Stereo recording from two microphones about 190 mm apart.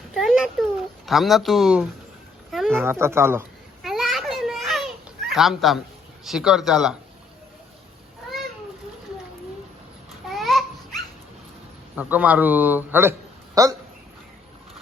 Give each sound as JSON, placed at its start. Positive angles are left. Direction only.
{"t": 0.1, "sound": "a sound", "side_deg": 0}
{"t": 2.8, "sound": "a man's voice", "side_deg": -15}
{"t": 3.8, "sound": "children playing", "side_deg": 0}
{"t": 6.2, "sound": "speech", "side_deg": -5}
{"t": 10.2, "sound": "babbling", "side_deg": 0}
{"t": 11.9, "sound": "a man's voice", "side_deg": -10}